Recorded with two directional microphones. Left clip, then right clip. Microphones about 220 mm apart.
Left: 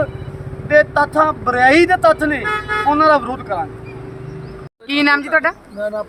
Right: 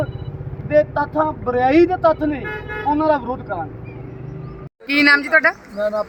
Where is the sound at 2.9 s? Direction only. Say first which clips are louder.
Left 4 dB; 15° left (ahead or behind).